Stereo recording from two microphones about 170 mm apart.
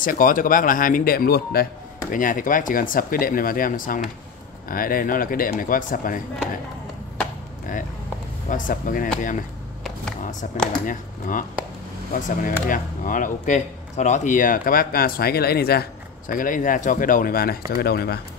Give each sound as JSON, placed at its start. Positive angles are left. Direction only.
{"t": 0.0, "sound": "speech", "side_deg": 55}
{"t": 8.5, "sound": "speech", "side_deg": 50}
{"t": 10.9, "sound": "speech", "side_deg": 50}